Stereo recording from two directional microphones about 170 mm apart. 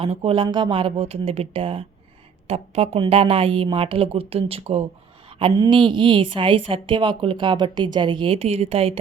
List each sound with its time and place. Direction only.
0.0 s speech: 35° right (ahead or behind)